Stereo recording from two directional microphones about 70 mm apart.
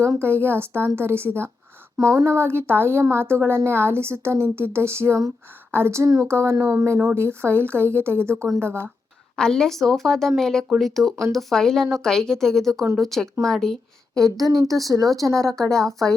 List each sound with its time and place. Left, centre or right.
0.5 s a woman's voice: right
9.3 s a woman's voice: centre
14.3 s speech: right
15.0 s a woman's voice: centre